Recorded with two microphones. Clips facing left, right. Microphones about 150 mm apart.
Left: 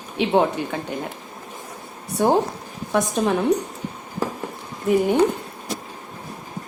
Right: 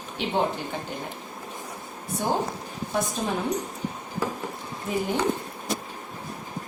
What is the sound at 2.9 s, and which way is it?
Speech, 80° left.